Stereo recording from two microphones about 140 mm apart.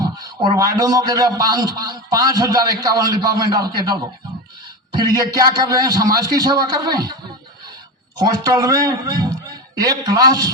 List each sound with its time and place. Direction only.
0.0 s a man's voice: 30° right (ahead or behind)
5.1 s a man's voice: 30° right (ahead or behind)
8.2 s a man's voice: 30° right (ahead or behind)